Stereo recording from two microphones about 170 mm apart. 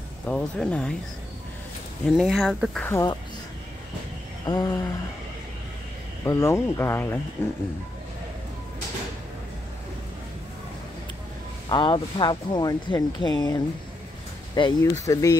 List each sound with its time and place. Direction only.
0.3 s speech: 5° left (ahead or behind)
2.0 s speech: centre (ahead or behind)
2.9 s speech: 20° left (ahead or behind)
4.5 s speech: 20° left (ahead or behind)
6.2 s speech: 15° left (ahead or behind)
11.7 s speech: 25° left (ahead or behind)